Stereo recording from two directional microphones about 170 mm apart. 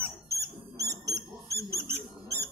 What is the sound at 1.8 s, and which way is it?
Rodents, 15° right (ahead or behind).